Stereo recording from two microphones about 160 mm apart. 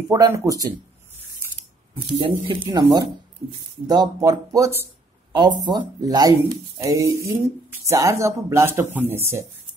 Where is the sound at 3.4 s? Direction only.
40° right (ahead or behind).